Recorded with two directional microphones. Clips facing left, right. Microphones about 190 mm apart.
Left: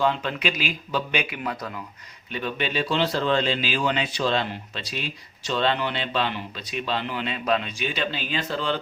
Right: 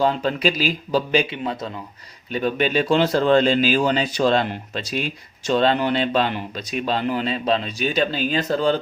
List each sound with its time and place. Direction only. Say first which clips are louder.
0.0 s speech: right 4 dB; 40° right (ahead or behind)
2.3 s speech: right 7 dB; 40° right (ahead or behind)